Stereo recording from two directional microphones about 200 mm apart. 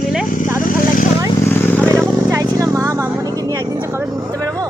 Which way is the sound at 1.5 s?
10° left (ahead or behind).